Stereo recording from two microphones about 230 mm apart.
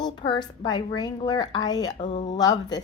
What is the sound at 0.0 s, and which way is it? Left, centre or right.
A woman's voice, centre.